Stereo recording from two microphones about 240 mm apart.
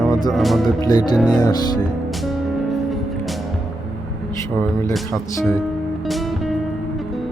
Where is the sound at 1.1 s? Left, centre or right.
Centre.